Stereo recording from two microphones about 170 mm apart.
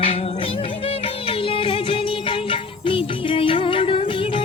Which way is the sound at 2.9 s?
30° left (ahead or behind).